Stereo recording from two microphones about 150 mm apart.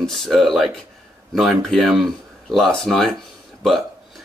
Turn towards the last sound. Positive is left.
turn(degrees=0)  # may be behind; listen again after turning